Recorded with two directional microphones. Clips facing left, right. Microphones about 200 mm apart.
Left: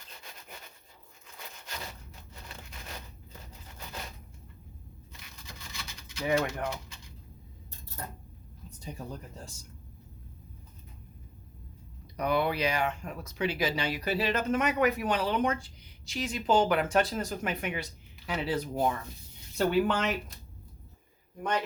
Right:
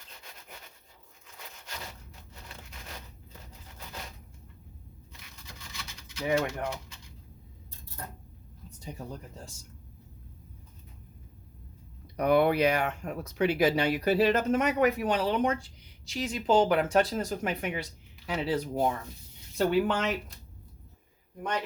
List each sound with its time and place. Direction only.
6.2 s speech: 20° right (ahead or behind)
12.1 s speech: 55° right (ahead or behind); by 20.1 s 20° right (ahead or behind)